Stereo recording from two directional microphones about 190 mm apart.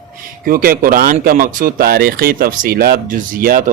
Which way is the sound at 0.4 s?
50° right (ahead or behind).